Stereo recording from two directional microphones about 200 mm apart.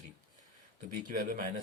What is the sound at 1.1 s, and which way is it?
Speech, 45° right (ahead or behind).